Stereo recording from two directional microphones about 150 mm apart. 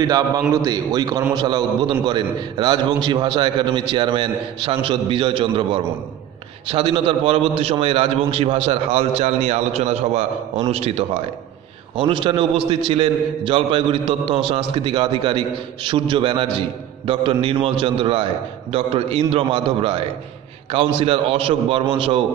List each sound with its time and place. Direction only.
0.7 s a man's voice: 25° right (ahead or behind)